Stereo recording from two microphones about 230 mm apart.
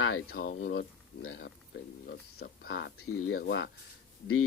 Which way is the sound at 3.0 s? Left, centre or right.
Left.